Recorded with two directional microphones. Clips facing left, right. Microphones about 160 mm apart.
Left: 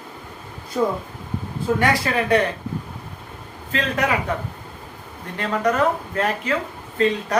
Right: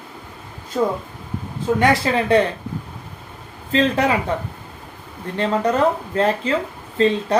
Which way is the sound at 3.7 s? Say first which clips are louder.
Right 5 dB; 30° right (ahead or behind).